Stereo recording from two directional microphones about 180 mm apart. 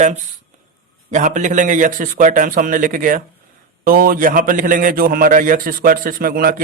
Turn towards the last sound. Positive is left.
turn(degrees=-55)  # may be behind; listen again after turning